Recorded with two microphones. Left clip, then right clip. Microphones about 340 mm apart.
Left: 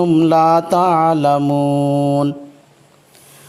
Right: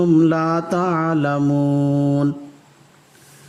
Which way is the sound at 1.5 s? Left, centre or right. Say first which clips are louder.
Left 4 dB; left.